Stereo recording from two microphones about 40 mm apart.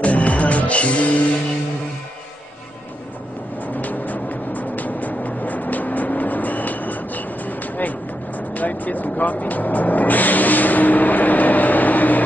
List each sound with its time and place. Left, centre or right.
0.0 s music: left
3.6 s music: left